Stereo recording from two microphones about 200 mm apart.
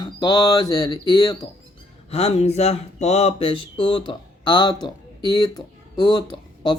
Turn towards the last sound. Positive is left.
turn(degrees=20)  # may be behind; listen again after turning